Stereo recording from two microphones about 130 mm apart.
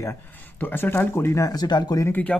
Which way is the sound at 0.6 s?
15° left (ahead or behind).